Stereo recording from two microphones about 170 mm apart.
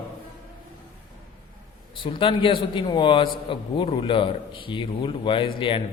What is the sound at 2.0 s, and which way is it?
A man's voice, 30° left (ahead or behind).